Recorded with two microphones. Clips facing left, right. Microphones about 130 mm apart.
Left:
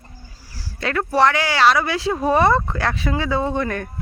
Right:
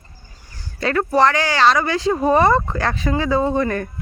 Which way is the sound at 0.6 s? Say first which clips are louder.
Right 3 dB; centre (ahead or behind).